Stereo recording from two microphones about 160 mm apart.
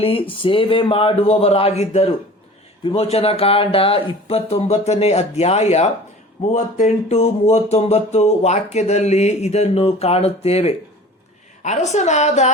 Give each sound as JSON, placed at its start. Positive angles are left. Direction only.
{"t": 0.0, "sound": "a woman's voice", "side_deg": 35}